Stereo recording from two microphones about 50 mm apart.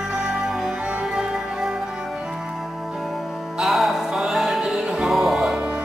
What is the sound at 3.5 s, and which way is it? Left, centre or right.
Music, centre.